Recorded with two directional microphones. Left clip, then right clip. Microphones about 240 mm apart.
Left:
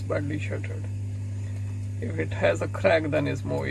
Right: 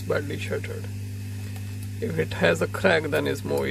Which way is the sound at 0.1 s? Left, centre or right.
Right.